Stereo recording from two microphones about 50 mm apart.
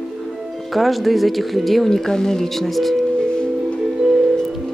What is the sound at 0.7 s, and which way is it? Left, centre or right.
Speech, centre.